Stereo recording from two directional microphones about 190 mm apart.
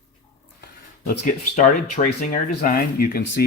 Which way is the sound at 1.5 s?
40° left (ahead or behind).